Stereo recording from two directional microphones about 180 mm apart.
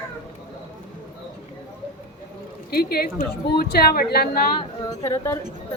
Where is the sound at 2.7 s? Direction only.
60° left (ahead or behind).